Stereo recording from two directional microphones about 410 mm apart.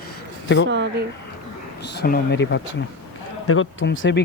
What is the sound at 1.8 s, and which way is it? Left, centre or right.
Speech, left.